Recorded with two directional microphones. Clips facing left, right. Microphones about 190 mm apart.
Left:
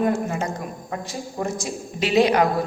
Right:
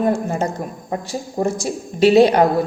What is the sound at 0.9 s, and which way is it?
Speech, 30° right (ahead or behind).